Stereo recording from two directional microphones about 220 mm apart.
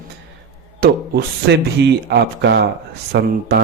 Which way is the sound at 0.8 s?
50° right (ahead or behind).